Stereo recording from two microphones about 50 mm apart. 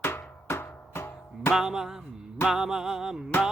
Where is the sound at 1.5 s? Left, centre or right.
Centre.